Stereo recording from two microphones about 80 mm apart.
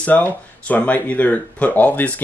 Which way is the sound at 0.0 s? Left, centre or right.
Centre.